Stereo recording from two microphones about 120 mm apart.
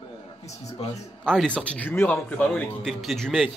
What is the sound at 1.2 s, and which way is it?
Speech, 5° left (ahead or behind).